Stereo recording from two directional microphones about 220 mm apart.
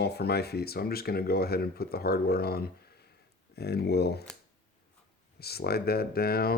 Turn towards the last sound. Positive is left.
turn(degrees=45)  # may be behind; listen again after turning